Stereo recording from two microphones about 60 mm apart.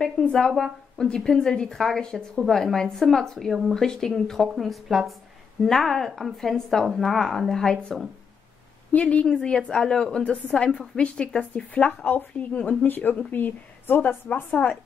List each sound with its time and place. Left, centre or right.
0.0 s speech: centre
8.9 s speech: centre
10.2 s a woman's voice: left